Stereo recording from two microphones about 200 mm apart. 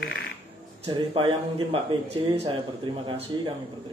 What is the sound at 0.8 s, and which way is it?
Speech, 25° right (ahead or behind).